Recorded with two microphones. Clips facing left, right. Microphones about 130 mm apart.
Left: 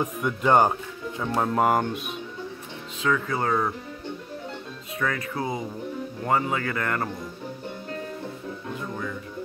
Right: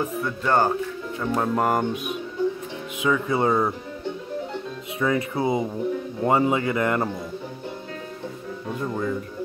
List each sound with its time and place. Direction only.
0.0 s speech: 15° left (ahead or behind)
1.2 s speech: centre (ahead or behind)
3.0 s speech: 15° right (ahead or behind)
4.9 s speech: 20° right (ahead or behind)